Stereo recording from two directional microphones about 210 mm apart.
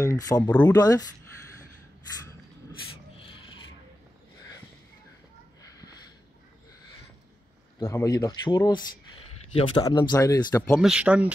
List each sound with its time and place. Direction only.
0.0 s speech: 15° left (ahead or behind)
3.2 s a sound: 25° left (ahead or behind)
7.8 s speech: 15° left (ahead or behind)
9.5 s speech: 25° left (ahead or behind)
10.7 s speech: 5° right (ahead or behind)